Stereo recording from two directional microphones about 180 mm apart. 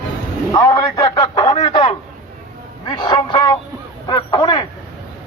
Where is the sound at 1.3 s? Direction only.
40° left (ahead or behind).